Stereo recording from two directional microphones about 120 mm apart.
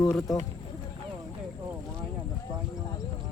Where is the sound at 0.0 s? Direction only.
5° left (ahead or behind).